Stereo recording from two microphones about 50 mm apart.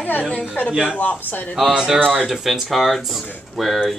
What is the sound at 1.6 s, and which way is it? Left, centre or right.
Speech, centre.